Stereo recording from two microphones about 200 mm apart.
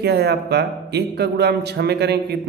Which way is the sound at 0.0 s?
55° right (ahead or behind).